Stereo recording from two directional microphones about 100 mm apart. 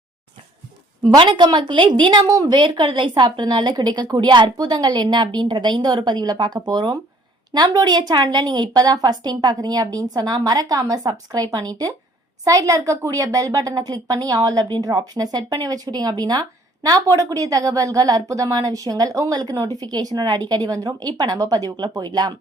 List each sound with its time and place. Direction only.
1.1 s a woman's voice: 50° right (ahead or behind)
2.2 s speech: 40° right (ahead or behind)
2.6 s a woman's voice: 55° right (ahead or behind)